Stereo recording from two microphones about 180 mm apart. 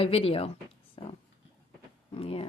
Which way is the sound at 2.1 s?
30° left (ahead or behind).